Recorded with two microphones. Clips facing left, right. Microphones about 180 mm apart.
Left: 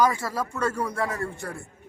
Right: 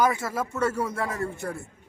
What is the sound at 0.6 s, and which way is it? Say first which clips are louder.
Speech: right 1 dB; 5° right (ahead or behind).